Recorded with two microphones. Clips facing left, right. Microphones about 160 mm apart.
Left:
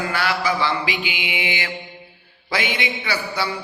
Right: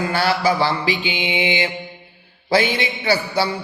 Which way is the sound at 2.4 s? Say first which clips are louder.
Right 6 dB; 35° right (ahead or behind).